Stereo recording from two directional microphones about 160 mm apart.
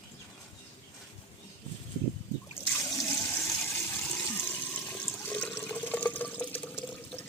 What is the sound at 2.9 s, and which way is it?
Water, 20° left (ahead or behind).